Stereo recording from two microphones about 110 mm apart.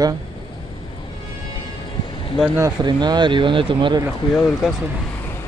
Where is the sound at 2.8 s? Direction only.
40° right (ahead or behind).